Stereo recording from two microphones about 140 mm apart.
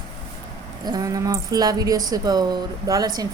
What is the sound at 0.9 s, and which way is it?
Speech, 25° right (ahead or behind).